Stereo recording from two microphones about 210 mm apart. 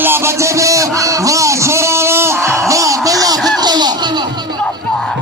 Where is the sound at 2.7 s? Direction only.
15° right (ahead or behind).